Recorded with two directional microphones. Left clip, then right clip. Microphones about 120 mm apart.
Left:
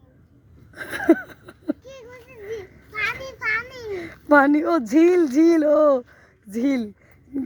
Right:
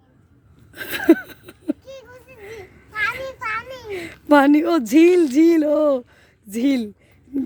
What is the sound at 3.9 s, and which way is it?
Speech, 45° right (ahead or behind).